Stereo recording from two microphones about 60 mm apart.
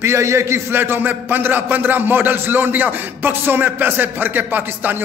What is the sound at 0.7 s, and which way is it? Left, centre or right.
Speech, right.